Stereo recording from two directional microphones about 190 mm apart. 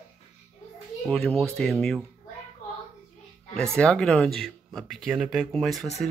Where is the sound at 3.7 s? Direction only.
5° left (ahead or behind).